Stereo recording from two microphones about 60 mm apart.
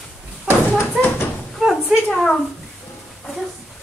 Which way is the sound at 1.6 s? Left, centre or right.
Centre.